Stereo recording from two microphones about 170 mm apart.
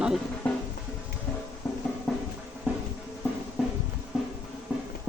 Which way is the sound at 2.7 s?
10° right (ahead or behind).